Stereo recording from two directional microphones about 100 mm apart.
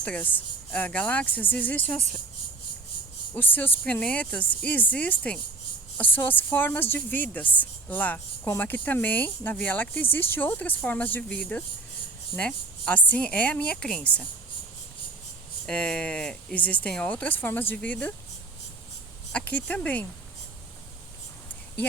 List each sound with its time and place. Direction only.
0.0 s speech: 15° left (ahead or behind)
3.3 s speech: 20° left (ahead or behind)
15.6 s speech: 10° left (ahead or behind)
19.3 s speech: 15° left (ahead or behind)